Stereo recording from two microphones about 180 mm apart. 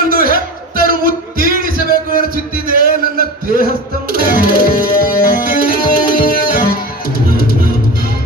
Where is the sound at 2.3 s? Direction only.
50° right (ahead or behind).